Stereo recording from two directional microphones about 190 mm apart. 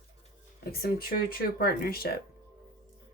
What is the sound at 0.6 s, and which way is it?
Speech, 55° left (ahead or behind).